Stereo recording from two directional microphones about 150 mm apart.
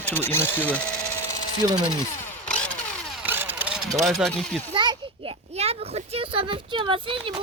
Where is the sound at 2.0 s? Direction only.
15° left (ahead or behind).